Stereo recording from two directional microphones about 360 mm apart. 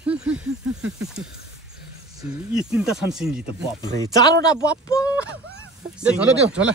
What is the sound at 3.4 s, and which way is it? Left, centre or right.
Speech, centre.